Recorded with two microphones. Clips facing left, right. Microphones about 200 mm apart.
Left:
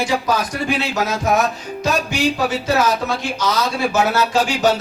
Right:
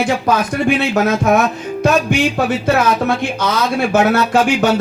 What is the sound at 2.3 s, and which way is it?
Speech, 55° right (ahead or behind).